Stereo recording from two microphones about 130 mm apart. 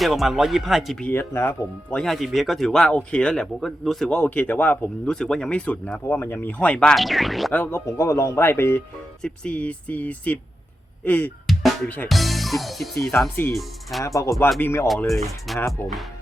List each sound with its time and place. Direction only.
0.0 s speech: centre (ahead or behind)
1.1 s speech: 20° left (ahead or behind); by 7.5 s centre (ahead or behind)
7.5 s speech: 15° left (ahead or behind)
9.2 s speech: 10° left (ahead or behind)
11.5 s music: centre (ahead or behind)
12.0 s speech: centre (ahead or behind)
14.0 s speech: 25° left (ahead or behind)
14.8 s speech: centre (ahead or behind)